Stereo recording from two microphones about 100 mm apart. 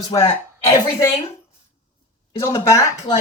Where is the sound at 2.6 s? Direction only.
30° left (ahead or behind).